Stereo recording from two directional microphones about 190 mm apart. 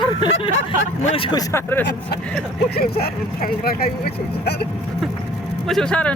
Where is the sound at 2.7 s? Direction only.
50° left (ahead or behind).